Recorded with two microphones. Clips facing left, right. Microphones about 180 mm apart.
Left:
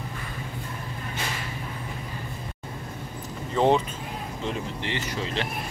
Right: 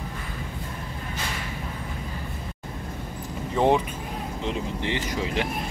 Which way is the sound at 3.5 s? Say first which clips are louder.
Even; 15° right (ahead or behind).